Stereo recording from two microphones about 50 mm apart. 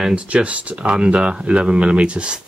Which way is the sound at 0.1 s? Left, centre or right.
Right.